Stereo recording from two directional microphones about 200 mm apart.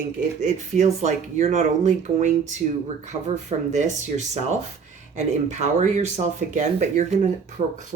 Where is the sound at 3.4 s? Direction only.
35° right (ahead or behind).